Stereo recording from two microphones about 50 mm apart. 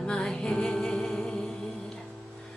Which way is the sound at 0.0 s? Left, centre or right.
Centre.